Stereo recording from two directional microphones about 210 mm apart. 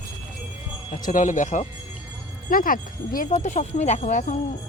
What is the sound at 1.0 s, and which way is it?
Speech, 40° left (ahead or behind).